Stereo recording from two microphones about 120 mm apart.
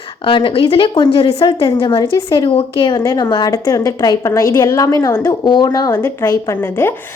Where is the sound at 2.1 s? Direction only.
30° left (ahead or behind).